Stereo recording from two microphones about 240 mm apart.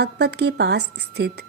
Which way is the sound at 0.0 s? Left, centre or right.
Right.